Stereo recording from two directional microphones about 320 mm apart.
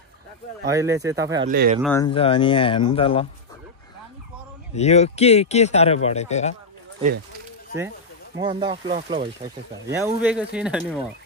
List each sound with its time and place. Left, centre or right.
0.7 s speech: centre
1.4 s speech: right
1.8 s speech: centre
4.7 s speech: centre
8.4 s speech: centre